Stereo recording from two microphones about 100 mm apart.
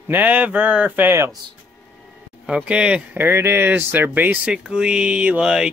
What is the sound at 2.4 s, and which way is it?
Speech, 10° right (ahead or behind).